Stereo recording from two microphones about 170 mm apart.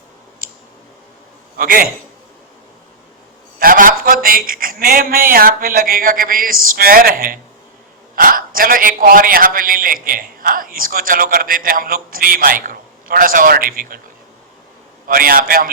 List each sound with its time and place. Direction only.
1.5 s a man's voice: 60° right (ahead or behind)
3.6 s a man's voice: 55° right (ahead or behind)
15.0 s a man's voice: 60° right (ahead or behind)